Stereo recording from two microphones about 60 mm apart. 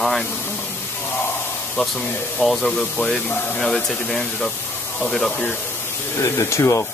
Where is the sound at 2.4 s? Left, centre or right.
Centre.